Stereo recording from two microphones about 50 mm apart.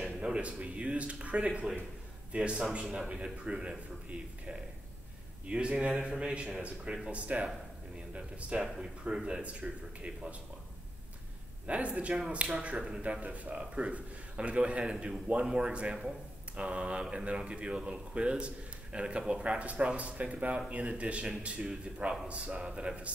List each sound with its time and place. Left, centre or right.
0.0 s speech: centre
5.5 s speech: right
8.5 s speech: centre
11.6 s speech: right
13.2 s speech: right